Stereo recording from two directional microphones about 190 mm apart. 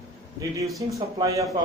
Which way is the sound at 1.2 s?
15° right (ahead or behind).